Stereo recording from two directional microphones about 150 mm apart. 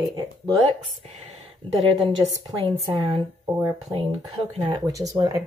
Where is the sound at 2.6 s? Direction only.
35° right (ahead or behind).